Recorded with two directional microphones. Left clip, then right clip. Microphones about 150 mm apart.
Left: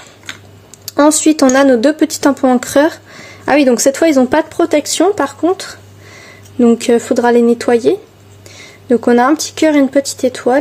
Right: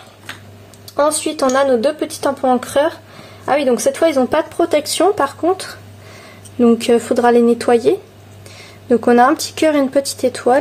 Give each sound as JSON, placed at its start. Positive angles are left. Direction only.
{"t": 0.8, "sound": "speech", "side_deg": 45}